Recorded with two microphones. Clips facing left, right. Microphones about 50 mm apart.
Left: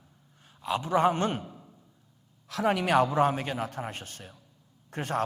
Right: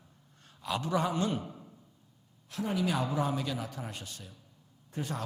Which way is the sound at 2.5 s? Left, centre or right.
Left.